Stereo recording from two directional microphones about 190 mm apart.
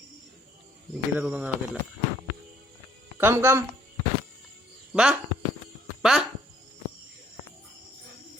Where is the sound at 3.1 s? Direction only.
10° right (ahead or behind).